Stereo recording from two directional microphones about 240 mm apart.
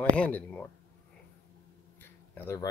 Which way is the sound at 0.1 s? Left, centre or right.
Centre.